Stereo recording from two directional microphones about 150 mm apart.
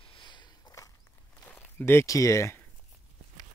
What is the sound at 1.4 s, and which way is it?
Speech, 10° left (ahead or behind).